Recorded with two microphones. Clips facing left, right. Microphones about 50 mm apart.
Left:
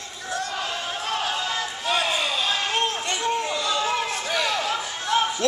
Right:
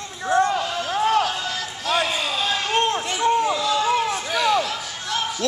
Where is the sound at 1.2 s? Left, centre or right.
Centre.